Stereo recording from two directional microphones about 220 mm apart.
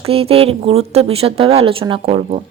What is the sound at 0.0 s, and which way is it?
A woman's voice, 25° right (ahead or behind).